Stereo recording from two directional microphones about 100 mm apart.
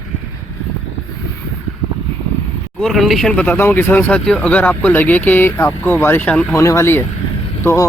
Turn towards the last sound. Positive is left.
turn(degrees=35)  # may be behind; listen again after turning